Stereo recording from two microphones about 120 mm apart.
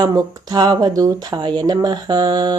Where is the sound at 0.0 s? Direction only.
35° right (ahead or behind).